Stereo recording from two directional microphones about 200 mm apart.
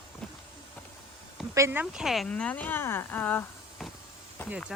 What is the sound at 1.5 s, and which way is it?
Speech, 10° right (ahead or behind).